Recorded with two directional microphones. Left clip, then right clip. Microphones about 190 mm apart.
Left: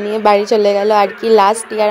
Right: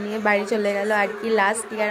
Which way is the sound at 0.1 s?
30° left (ahead or behind).